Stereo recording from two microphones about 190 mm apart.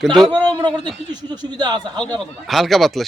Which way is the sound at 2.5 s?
Centre (ahead or behind).